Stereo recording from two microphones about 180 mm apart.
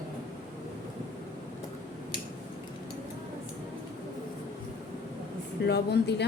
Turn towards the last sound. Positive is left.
turn(degrees=70)  # may be behind; listen again after turning